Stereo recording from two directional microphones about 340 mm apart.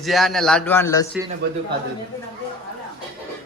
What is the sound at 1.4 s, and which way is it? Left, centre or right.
Speech, right.